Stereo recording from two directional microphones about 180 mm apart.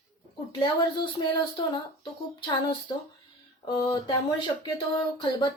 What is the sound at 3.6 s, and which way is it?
Speech, 20° left (ahead or behind).